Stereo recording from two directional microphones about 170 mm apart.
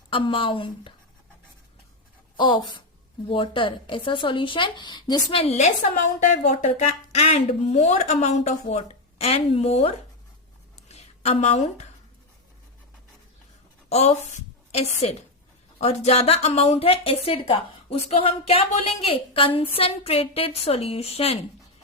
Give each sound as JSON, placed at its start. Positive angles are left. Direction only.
{"t": 0.1, "sound": "a woman's voice", "side_deg": 30}
{"t": 2.3, "sound": "a woman's voice", "side_deg": 30}
{"t": 10.8, "sound": "a sound", "side_deg": 40}
{"t": 13.9, "sound": "a woman's voice", "side_deg": 40}